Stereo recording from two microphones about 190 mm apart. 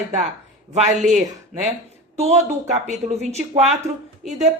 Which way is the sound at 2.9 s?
35° right (ahead or behind).